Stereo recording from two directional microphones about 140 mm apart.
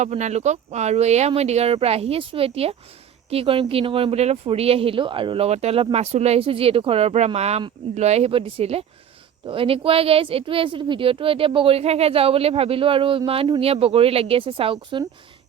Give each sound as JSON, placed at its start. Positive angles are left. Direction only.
{"t": 0.0, "sound": "a woman's voice", "side_deg": -55}